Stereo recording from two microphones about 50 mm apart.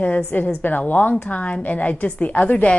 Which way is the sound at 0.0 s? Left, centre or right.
Left.